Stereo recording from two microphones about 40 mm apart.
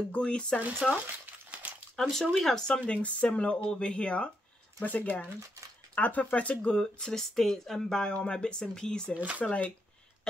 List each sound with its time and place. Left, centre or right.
0.1 s speech: left
0.8 s speech: centre
1.6 s a sound: right
2.0 s speech: centre
2.8 s speech: left
4.8 s speech: left
6.7 s speech: centre
8.1 s speech: left
9.1 s speech: right
9.4 s speech: left